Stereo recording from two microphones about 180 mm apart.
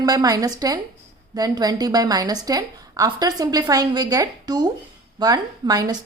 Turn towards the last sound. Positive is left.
turn(degrees=-20)  # may be behind; listen again after turning